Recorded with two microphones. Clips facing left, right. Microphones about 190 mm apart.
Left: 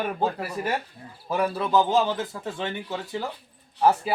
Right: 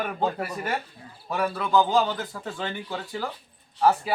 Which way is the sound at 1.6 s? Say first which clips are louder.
Right 1 dB; 25° left (ahead or behind).